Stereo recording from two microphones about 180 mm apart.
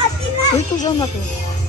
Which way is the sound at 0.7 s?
20° left (ahead or behind).